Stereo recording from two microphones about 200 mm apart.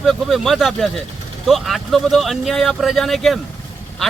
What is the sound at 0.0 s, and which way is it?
Speech, centre (ahead or behind).